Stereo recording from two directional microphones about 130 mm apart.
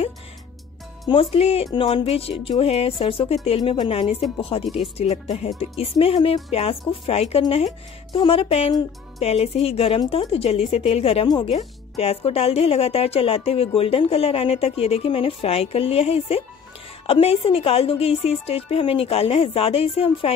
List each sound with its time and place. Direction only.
1.0 s a woman's voice: 45° left (ahead or behind)